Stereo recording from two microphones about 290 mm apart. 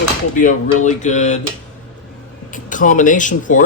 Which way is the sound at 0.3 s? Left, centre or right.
Left.